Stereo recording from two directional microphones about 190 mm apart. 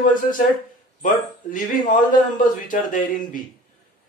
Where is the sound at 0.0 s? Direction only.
45° left (ahead or behind).